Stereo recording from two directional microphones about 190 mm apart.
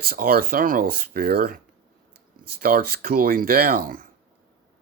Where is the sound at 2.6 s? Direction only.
50° right (ahead or behind).